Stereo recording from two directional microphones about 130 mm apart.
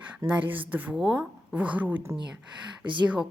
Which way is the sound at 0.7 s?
15° right (ahead or behind).